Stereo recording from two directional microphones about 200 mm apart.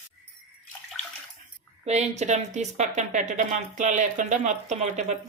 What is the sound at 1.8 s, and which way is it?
Speech, 35° right (ahead or behind).